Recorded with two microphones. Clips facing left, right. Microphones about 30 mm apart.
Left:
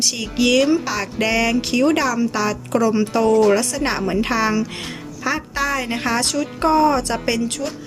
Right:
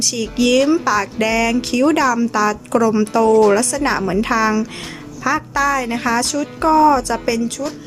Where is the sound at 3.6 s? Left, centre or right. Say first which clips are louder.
Right 3 dB; centre.